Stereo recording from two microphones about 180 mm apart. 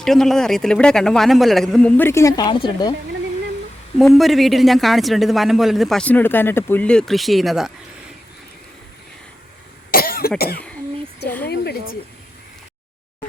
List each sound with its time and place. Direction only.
0.0 s speech: centre (ahead or behind); by 2.9 s 25° left (ahead or behind)
3.9 s speech: centre (ahead or behind)
9.9 s cough: 55° left (ahead or behind)